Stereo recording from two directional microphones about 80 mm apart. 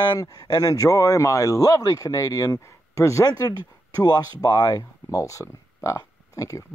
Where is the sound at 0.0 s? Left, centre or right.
Left.